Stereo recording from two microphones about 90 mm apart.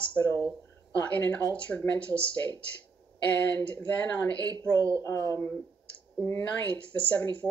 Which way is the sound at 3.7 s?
20° left (ahead or behind).